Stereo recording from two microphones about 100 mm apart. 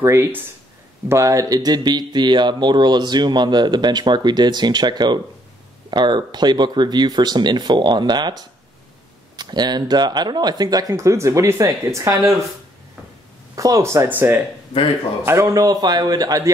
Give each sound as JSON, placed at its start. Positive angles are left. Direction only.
{"t": 0.0, "sound": "speech", "side_deg": -25}
{"t": 13.6, "sound": "speech", "side_deg": -35}
{"t": 14.0, "sound": "speech", "side_deg": -20}